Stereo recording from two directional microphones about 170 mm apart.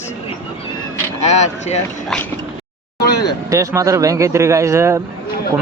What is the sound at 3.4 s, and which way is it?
Speech, 20° right (ahead or behind).